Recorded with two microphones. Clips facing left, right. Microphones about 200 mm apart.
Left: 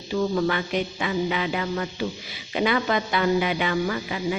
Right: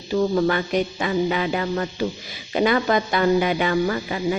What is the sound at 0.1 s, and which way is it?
Music, 40° right (ahead or behind).